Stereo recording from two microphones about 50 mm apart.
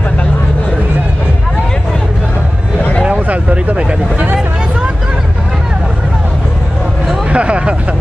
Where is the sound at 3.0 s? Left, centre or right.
Right.